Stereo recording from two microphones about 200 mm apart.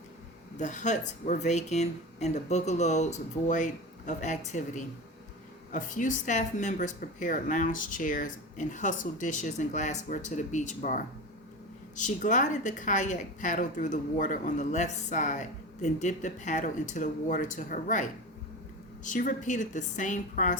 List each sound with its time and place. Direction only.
0.5 s a woman's voice: 35° left (ahead or behind)